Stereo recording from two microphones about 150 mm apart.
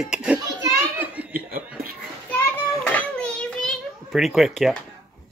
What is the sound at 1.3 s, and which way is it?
Chuckle, 70° right (ahead or behind).